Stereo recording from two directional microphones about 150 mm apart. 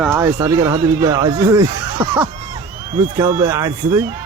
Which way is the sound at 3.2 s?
25° right (ahead or behind).